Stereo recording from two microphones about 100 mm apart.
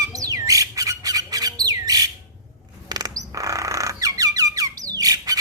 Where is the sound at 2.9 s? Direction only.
40° right (ahead or behind).